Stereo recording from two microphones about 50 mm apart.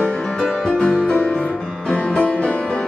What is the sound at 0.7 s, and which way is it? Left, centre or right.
Music, left.